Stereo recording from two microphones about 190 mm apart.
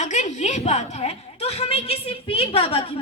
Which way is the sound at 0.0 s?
40° left (ahead or behind).